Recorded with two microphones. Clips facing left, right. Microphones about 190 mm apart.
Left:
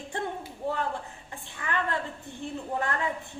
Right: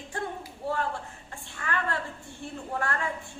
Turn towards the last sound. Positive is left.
turn(degrees=20)  # may be behind; listen again after turning